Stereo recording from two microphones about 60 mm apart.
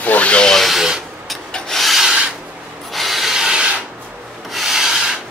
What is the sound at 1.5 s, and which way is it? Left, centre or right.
Rub, centre.